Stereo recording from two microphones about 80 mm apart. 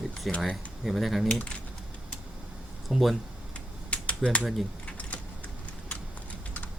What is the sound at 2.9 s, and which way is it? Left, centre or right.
Speech, centre.